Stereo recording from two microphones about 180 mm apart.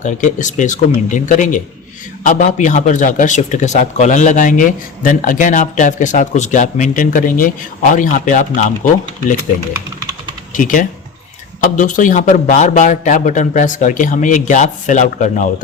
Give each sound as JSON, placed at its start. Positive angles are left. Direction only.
{"t": 0.0, "sound": "speech", "side_deg": 45}
{"t": 10.5, "sound": "speech", "side_deg": 50}